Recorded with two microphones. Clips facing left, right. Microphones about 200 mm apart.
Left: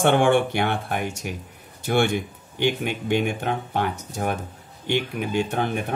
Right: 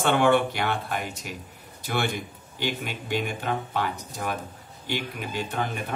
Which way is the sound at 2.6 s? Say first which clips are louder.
Left 7 dB; 55° left (ahead or behind).